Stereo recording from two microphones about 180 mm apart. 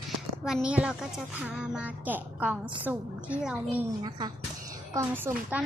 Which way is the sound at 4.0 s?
25° right (ahead or behind).